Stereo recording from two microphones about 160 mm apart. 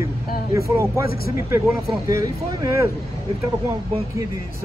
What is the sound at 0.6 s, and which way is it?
Speech, 20° right (ahead or behind).